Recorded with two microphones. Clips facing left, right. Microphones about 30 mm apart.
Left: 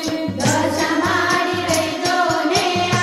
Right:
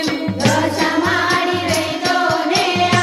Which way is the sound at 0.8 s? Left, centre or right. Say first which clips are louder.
Right 2 dB; right.